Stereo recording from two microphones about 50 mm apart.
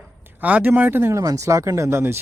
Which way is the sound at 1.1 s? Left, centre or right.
Right.